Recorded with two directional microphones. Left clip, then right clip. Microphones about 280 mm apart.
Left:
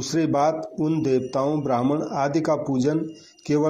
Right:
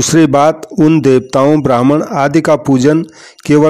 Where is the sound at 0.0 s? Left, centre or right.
Right.